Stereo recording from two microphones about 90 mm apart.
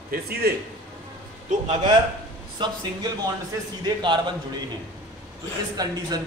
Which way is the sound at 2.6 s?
60° right (ahead or behind).